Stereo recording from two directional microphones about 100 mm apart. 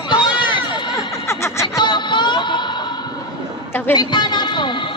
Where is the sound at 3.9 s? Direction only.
45° left (ahead or behind).